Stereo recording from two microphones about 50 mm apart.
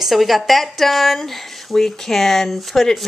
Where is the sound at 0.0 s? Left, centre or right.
Centre.